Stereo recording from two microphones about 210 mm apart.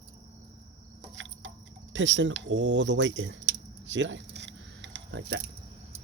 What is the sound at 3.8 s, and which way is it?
Keys jangling, 60° right (ahead or behind).